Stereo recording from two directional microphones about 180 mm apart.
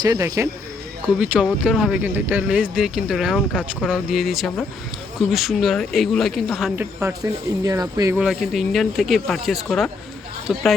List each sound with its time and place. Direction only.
0.0 s speech: 20° right (ahead or behind)
1.2 s speech: 5° right (ahead or behind)
7.6 s speech: 20° right (ahead or behind)
8.2 s speech: centre (ahead or behind)